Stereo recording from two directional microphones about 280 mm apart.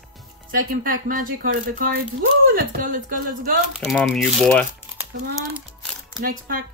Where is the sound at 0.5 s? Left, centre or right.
Right.